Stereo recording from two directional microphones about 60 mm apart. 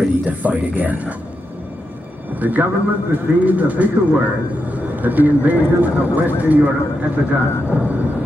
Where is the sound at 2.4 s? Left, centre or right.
Right.